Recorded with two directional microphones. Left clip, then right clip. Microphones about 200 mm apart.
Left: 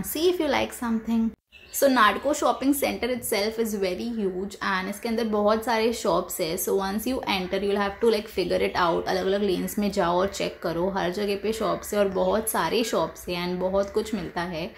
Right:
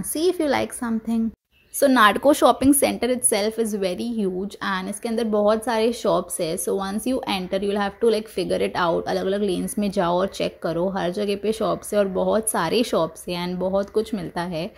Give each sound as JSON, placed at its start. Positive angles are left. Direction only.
{"t": 0.1, "sound": "a woman's voice", "side_deg": -35}